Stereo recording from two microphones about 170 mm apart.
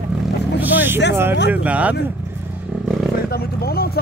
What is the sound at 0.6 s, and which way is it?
Vehicle, 10° right (ahead or behind).